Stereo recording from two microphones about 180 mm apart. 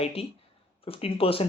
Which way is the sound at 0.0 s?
35° left (ahead or behind).